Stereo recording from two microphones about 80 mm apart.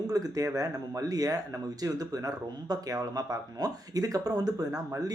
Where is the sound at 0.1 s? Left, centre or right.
Right.